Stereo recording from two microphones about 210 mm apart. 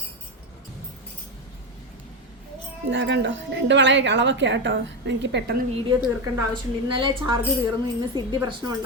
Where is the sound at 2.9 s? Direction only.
55° right (ahead or behind).